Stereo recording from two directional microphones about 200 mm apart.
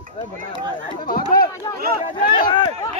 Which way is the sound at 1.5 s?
15° left (ahead or behind).